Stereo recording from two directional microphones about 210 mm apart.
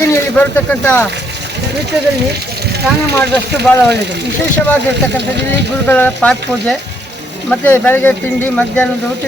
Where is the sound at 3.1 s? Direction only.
10° left (ahead or behind).